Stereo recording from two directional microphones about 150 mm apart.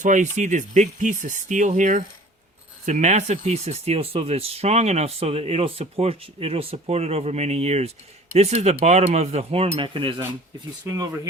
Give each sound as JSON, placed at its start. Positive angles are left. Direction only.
{"t": 0.0, "sound": "speech", "side_deg": -55}
{"t": 10.9, "sound": "speech", "side_deg": -25}